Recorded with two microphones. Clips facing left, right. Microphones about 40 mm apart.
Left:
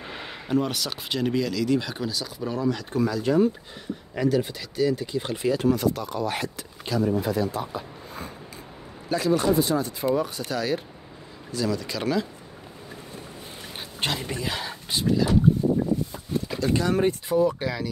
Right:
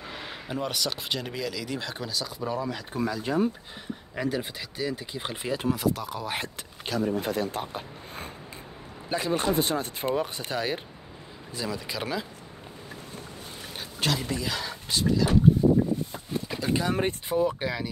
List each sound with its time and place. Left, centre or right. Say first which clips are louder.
0.5 s speech: left 5 dB; centre
5.9 s speech: left 4 dB; centre
6.4 s speech: left 3 dB; right
9.1 s speech: left 4 dB; right; by 12.3 s centre
14.0 s a sound: even; left
14.4 s speech: left 1 dB; left
16.3 s vehicle: left 3 dB; centre
16.9 s speech: left 4 dB; right